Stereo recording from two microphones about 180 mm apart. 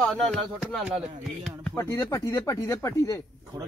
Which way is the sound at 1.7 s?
15° left (ahead or behind).